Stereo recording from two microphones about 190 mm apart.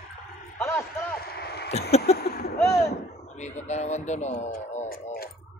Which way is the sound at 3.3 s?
35° left (ahead or behind).